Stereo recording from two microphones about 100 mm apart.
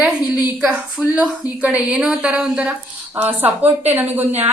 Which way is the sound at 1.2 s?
10° right (ahead or behind).